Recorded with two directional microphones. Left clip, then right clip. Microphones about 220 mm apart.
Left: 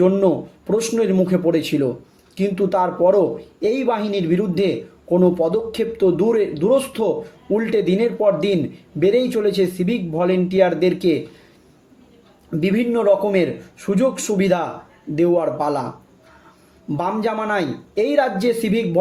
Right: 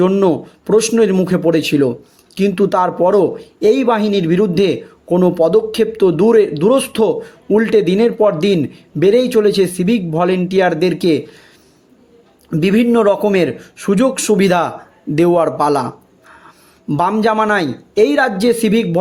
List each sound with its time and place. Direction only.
0.0 s speech: 40° right (ahead or behind)
12.5 s speech: 40° right (ahead or behind)
16.9 s speech: 45° right (ahead or behind)